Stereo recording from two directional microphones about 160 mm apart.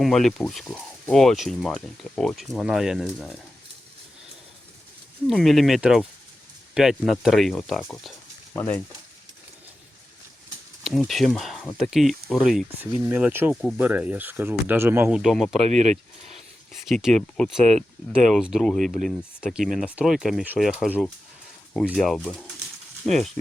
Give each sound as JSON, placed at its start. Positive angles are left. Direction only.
{"t": 0.0, "sound": "speech", "side_deg": 0}
{"t": 5.3, "sound": "speech", "side_deg": 0}
{"t": 8.5, "sound": "speech", "side_deg": 10}
{"t": 10.8, "sound": "speech", "side_deg": 0}
{"t": 15.2, "sound": "speech", "side_deg": 0}
{"t": 15.7, "sound": "speech", "side_deg": -45}
{"t": 16.9, "sound": "speech", "side_deg": 0}